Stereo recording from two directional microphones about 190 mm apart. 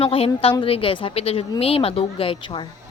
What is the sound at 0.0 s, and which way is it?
A woman's voice, 30° left (ahead or behind).